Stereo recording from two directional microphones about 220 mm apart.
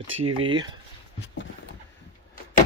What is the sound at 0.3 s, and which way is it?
Speech, 20° right (ahead or behind).